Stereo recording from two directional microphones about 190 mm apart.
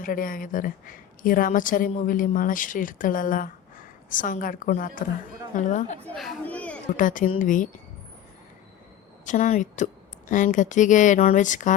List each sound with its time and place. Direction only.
0.0 s a woman's voice: 45° left (ahead or behind)
6.1 s speech: 5° left (ahead or behind)
6.9 s a woman's voice: 45° left (ahead or behind)
9.2 s a woman's voice: 40° left (ahead or behind)